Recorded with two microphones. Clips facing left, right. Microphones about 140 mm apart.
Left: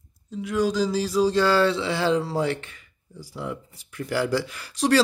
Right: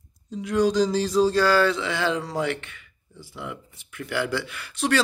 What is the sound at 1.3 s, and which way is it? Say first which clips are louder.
Speech: even; 25° left (ahead or behind).